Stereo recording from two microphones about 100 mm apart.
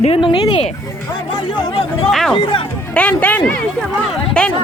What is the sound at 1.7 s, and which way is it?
Speech, 60° left (ahead or behind).